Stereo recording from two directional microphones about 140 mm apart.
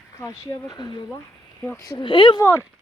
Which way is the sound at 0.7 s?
35° left (ahead or behind).